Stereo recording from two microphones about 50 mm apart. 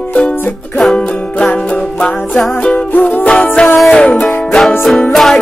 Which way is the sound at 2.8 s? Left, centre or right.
Left.